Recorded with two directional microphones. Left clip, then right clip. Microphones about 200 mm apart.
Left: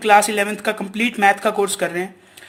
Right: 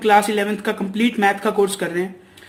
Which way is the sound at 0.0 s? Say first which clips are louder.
Left 1 dB; 25° left (ahead or behind).